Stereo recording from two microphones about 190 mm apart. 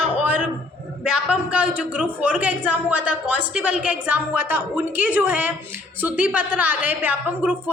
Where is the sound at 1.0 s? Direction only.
5° right (ahead or behind).